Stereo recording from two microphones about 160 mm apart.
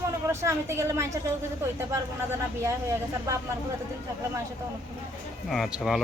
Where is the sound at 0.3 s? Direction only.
15° right (ahead or behind).